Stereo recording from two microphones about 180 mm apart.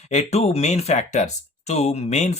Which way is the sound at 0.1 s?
35° left (ahead or behind).